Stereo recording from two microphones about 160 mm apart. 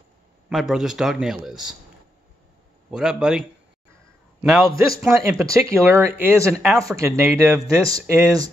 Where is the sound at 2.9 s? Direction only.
5° right (ahead or behind).